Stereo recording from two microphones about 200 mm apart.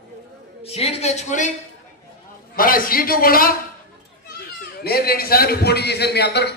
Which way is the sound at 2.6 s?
45° left (ahead or behind).